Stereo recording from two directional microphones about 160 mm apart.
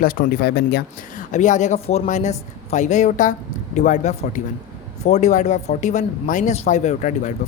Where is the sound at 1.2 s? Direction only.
50° left (ahead or behind).